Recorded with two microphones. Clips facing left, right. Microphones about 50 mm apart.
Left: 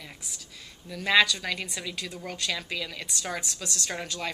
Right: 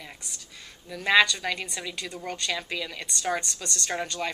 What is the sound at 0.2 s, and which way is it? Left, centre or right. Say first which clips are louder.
A woman's voice: right 1 dB; centre.